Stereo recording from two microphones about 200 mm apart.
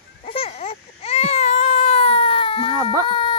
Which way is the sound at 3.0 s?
25° left (ahead or behind).